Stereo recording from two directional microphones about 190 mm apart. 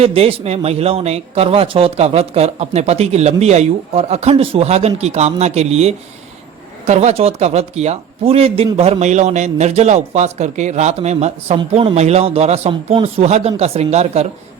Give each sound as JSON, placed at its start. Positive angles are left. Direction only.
{"t": 0.0, "sound": "speech", "side_deg": -30}